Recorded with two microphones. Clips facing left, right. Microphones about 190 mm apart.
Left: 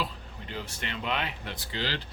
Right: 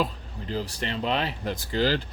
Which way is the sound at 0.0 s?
35° right (ahead or behind).